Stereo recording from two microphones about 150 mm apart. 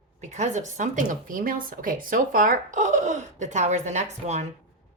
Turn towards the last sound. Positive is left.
turn(degrees=-50)  # may be behind; listen again after turning